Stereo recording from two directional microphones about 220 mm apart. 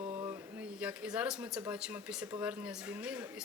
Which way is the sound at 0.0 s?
25° right (ahead or behind).